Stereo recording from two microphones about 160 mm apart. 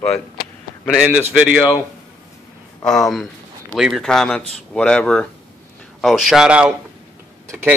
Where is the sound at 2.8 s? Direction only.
5° left (ahead or behind).